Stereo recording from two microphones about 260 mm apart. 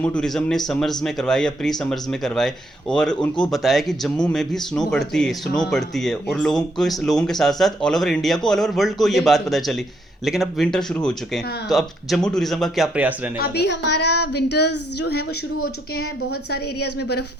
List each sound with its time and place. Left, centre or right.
0.0 s speech: centre
13.4 s a woman's voice: left
15.5 s speech: left
16.5 s a woman's voice: left